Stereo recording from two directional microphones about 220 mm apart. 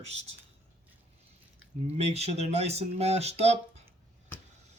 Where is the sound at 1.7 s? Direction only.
35° right (ahead or behind).